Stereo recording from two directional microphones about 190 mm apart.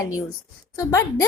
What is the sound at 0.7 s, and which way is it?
Speech, 15° left (ahead or behind).